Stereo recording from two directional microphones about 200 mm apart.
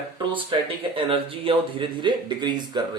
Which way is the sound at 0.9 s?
25° right (ahead or behind).